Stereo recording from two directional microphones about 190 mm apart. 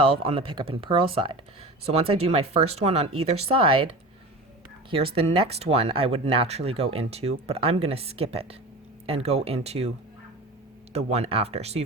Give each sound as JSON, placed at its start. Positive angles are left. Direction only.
{"t": 0.0, "sound": "speech", "side_deg": -30}
{"t": 4.9, "sound": "speech", "side_deg": -30}
{"t": 10.9, "sound": "speech", "side_deg": -35}